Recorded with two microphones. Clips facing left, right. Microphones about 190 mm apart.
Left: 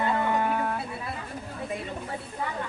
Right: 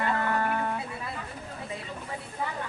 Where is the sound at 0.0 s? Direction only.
15° left (ahead or behind).